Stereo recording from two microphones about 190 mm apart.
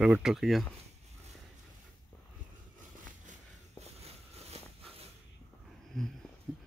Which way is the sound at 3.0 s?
35° right (ahead or behind).